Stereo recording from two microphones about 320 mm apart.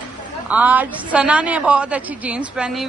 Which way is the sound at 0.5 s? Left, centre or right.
Centre.